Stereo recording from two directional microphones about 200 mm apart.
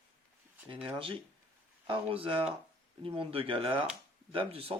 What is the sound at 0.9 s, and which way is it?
Speech, 25° right (ahead or behind).